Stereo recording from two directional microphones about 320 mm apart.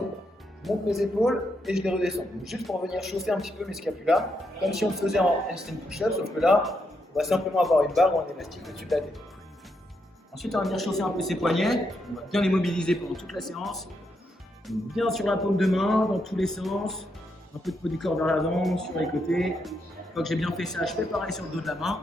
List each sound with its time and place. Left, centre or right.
0.6 s a man's voice: centre
10.3 s a man's voice: centre